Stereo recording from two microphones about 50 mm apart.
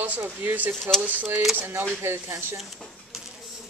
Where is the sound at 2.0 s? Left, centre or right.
Right.